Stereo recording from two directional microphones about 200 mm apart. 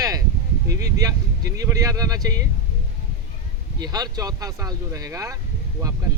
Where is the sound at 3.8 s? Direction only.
20° right (ahead or behind).